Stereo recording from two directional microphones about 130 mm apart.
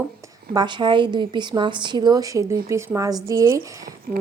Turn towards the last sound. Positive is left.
turn(degrees=-25)  # may be behind; listen again after turning